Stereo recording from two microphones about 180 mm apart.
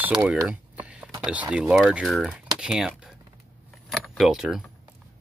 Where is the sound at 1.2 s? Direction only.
5° right (ahead or behind).